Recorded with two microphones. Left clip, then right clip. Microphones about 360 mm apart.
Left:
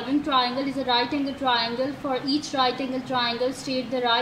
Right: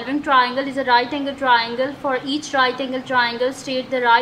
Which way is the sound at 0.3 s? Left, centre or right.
Right.